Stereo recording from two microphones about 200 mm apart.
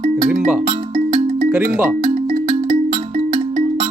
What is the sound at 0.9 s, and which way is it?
Music, 45° right (ahead or behind).